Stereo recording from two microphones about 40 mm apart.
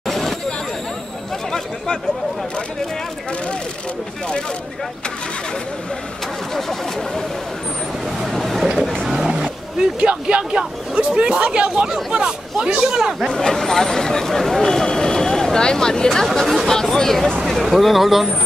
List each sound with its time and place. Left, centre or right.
0.0 s hubbub: centre
6.5 s speech: centre
8.2 s vehicle: centre
9.3 s a sound: centre
10.3 s speech: right
13.3 s speech: centre